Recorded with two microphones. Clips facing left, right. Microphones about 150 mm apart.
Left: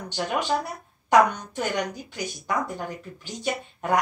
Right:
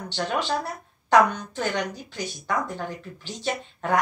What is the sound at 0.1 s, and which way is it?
Speech, 10° left (ahead or behind).